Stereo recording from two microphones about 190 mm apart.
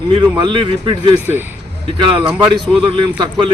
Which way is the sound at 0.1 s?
25° right (ahead or behind).